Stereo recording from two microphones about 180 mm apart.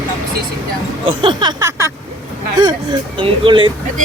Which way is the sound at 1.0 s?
25° right (ahead or behind).